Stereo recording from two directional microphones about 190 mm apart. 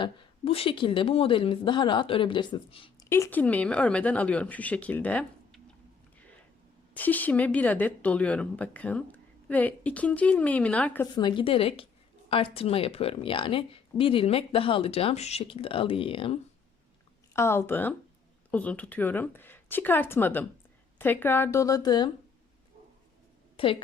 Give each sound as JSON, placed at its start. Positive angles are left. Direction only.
{"t": 0.0, "sound": "speech", "side_deg": 30}
{"t": 3.1, "sound": "speech", "side_deg": 10}
{"t": 6.1, "sound": "a sound", "side_deg": 5}
{"t": 6.9, "sound": "speech", "side_deg": 10}
{"t": 11.1, "sound": "speech", "side_deg": 25}
{"t": 17.3, "sound": "speech", "side_deg": 15}
{"t": 23.6, "sound": "a woman's voice", "side_deg": 30}